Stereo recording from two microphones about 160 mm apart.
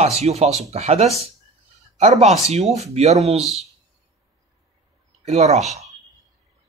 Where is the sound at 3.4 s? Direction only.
Centre (ahead or behind).